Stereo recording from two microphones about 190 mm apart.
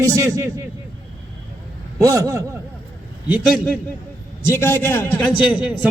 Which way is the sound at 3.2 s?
10° right (ahead or behind).